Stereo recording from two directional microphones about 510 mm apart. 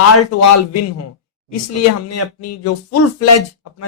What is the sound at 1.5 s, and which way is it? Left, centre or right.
Speech, left.